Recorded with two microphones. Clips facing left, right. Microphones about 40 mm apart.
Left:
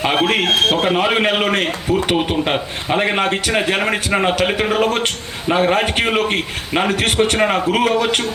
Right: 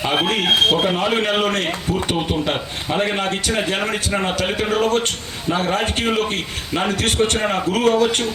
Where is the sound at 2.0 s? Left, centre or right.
Left.